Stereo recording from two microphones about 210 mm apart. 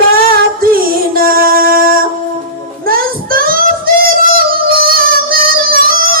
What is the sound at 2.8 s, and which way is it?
Child singing, 45° right (ahead or behind).